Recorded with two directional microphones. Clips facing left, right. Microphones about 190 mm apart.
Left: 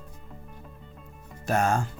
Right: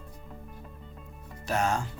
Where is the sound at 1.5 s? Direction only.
50° left (ahead or behind).